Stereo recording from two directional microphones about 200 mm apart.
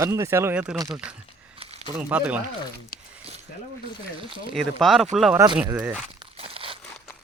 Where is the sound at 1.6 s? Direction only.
30° right (ahead or behind).